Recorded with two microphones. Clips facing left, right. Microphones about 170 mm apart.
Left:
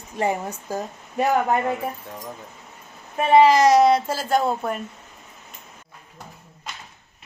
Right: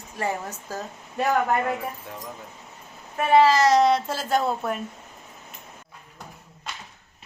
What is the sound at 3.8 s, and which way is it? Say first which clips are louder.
A woman's voice: left 3 dB; centre (ahead or behind).